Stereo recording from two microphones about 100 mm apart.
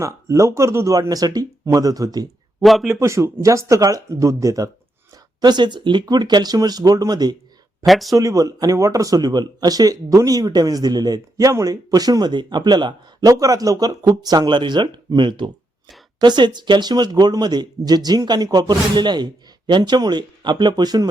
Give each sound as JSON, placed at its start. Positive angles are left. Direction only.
{"t": 0.0, "sound": "speech", "side_deg": -30}
{"t": 2.6, "sound": "speech", "side_deg": 0}
{"t": 2.9, "sound": "speech", "side_deg": -30}
{"t": 5.4, "sound": "speech", "side_deg": -45}
{"t": 7.9, "sound": "speech", "side_deg": 0}
{"t": 8.1, "sound": "speech", "side_deg": -35}